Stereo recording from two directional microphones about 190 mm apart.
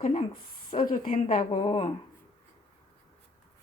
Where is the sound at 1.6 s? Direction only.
30° left (ahead or behind).